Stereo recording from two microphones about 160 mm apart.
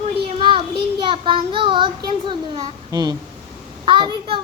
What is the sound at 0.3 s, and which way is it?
Child singing, 35° right (ahead or behind).